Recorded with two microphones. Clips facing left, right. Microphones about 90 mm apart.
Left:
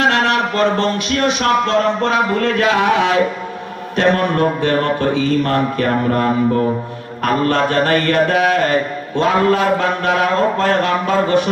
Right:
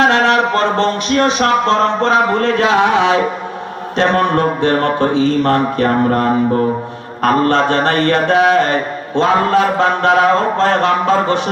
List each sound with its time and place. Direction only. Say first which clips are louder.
0.1 s a man's voice: right 4 dB; 30° right (ahead or behind)